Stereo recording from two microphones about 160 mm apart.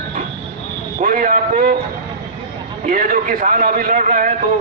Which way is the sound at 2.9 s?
60° right (ahead or behind).